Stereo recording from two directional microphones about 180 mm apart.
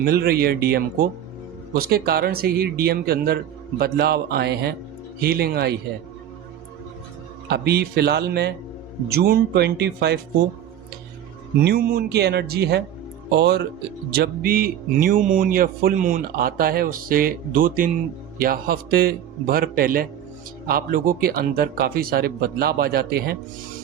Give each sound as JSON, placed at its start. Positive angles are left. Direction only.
{"t": 0.0, "sound": "speech", "side_deg": -60}
{"t": 7.5, "sound": "speech", "side_deg": -65}
{"t": 11.6, "sound": "speech", "side_deg": -55}
{"t": 14.1, "sound": "speech", "side_deg": -55}